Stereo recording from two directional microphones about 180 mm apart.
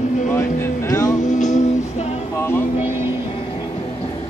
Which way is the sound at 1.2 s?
40° left (ahead or behind).